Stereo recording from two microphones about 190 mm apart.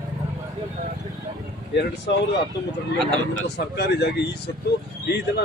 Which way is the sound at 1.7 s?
65° left (ahead or behind).